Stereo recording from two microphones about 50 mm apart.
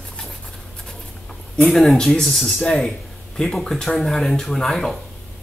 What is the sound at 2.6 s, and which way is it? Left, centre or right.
Speech, centre.